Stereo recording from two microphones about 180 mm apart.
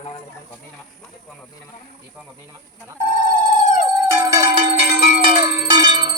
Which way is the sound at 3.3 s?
45° left (ahead or behind).